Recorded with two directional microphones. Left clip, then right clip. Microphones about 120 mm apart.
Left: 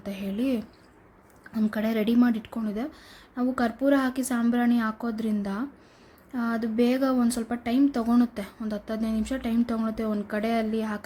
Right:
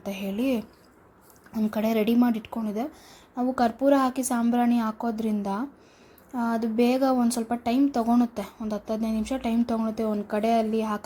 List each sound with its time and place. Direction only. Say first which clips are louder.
0.0 s speech: right 2 dB; 10° right (ahead or behind)
1.7 s speech: right 2 dB; 15° right (ahead or behind)
8.0 s speech: right 1 dB; 5° right (ahead or behind)
10.1 s speech: right 2 dB; centre (ahead or behind)
10.3 s speech: right 4 dB; 15° right (ahead or behind)